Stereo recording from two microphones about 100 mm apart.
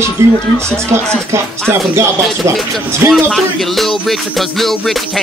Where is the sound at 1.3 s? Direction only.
25° right (ahead or behind).